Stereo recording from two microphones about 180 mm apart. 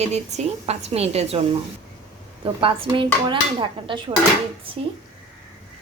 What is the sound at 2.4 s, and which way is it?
Speech, 30° right (ahead or behind).